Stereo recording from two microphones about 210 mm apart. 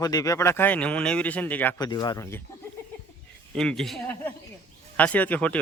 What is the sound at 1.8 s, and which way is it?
Speech, 20° left (ahead or behind).